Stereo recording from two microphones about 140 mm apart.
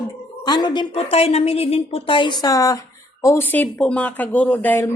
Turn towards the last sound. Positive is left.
turn(degrees=15)  # may be behind; listen again after turning